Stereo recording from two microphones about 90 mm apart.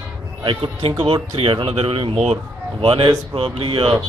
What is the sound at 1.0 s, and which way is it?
A man's voice, 75° right (ahead or behind).